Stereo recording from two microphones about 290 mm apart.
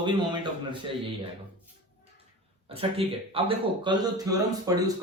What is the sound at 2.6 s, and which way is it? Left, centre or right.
Speech, centre.